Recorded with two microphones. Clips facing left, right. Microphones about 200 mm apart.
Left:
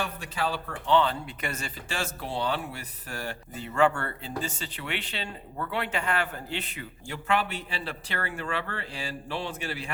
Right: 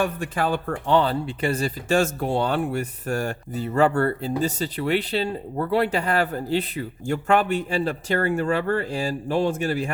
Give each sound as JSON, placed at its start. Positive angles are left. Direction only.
{"t": 0.0, "sound": "speech", "side_deg": -50}